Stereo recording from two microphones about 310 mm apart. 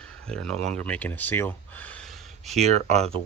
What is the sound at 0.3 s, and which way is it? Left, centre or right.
Speech, centre.